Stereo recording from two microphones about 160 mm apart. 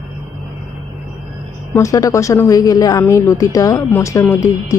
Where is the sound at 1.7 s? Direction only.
20° left (ahead or behind).